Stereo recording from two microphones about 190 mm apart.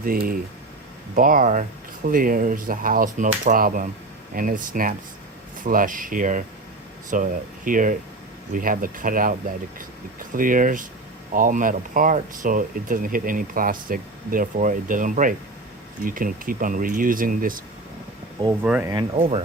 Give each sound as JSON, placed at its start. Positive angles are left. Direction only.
{"t": 0.0, "sound": "speech", "side_deg": -50}
{"t": 18.6, "sound": "speech", "side_deg": -5}
{"t": 19.1, "sound": "speech", "side_deg": -30}